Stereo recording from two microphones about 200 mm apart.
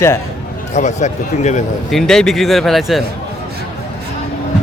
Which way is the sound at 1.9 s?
5° left (ahead or behind).